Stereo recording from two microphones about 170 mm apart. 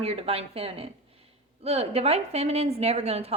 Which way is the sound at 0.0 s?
35° right (ahead or behind).